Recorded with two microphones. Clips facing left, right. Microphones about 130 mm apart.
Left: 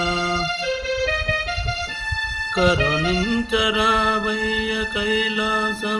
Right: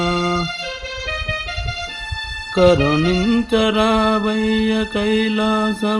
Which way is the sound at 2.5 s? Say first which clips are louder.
Right 7 dB; 50° right (ahead or behind).